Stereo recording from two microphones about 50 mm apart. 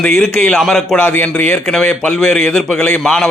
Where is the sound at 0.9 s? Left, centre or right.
Left.